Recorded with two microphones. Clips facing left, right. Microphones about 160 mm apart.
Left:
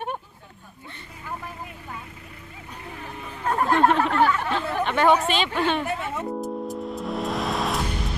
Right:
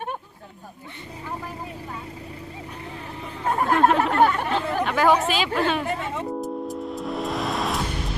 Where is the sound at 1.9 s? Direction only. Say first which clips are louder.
Right 4 dB; 30° right (ahead or behind).